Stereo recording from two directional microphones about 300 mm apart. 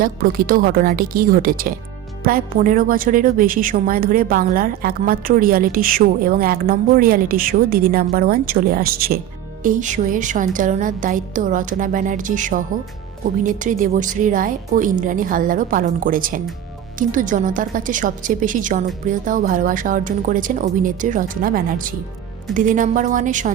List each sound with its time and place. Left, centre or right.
0.0 s a woman's voice: right